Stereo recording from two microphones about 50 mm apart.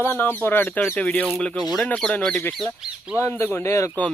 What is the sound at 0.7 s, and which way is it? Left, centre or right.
Speech, left.